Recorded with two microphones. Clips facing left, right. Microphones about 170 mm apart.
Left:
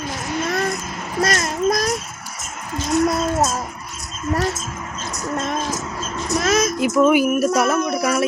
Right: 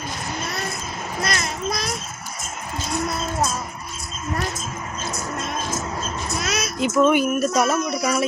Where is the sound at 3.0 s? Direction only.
40° left (ahead or behind).